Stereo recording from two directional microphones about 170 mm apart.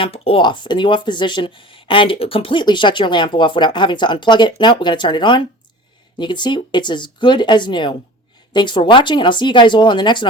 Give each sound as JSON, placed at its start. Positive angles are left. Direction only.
{"t": 0.0, "sound": "speech", "side_deg": 35}